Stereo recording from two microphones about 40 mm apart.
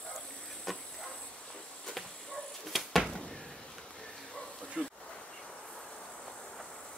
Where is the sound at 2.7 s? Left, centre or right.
Centre.